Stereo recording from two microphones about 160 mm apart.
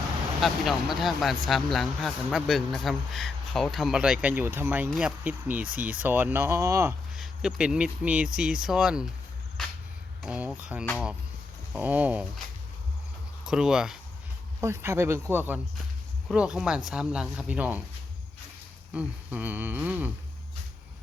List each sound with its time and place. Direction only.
0.4 s speech: centre (ahead or behind); by 6.9 s 15° right (ahead or behind)
7.2 s speech: 5° right (ahead or behind)
10.2 s speech: 5° right (ahead or behind)
13.4 s speech: 5° right (ahead or behind)
14.6 s speech: 15° right (ahead or behind)
18.9 s speech: 10° right (ahead or behind)